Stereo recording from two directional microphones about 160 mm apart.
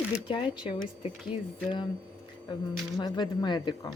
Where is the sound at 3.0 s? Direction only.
30° left (ahead or behind).